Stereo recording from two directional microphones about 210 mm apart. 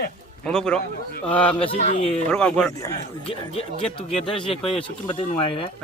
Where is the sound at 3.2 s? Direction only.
25° left (ahead or behind).